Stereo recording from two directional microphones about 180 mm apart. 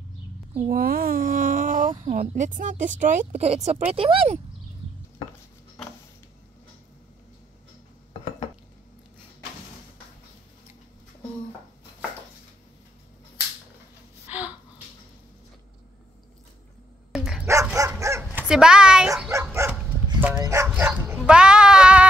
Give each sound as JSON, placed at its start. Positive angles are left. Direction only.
{"t": 0.7, "sound": "a sound", "side_deg": -55}
{"t": 2.0, "sound": "speech", "side_deg": -45}
{"t": 17.1, "sound": "dog", "side_deg": 0}
{"t": 17.5, "sound": "dog", "side_deg": -20}
{"t": 18.5, "sound": "bow-wow", "side_deg": -5}
{"t": 19.5, "sound": "dog", "side_deg": -15}
{"t": 20.7, "sound": "bow-wow", "side_deg": -5}
{"t": 21.2, "sound": "sheep", "side_deg": -5}